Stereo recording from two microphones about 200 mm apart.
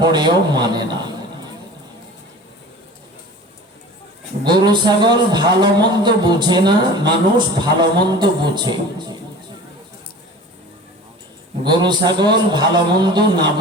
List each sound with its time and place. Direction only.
0.0 s a man's voice: 20° right (ahead or behind)
4.4 s a man's voice: 20° right (ahead or behind)
11.6 s a man's voice: 20° right (ahead or behind)